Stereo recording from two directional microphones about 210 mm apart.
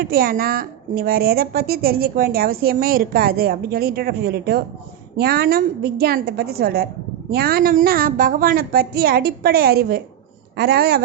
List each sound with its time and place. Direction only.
0.0 s a woman's voice: 45° right (ahead or behind)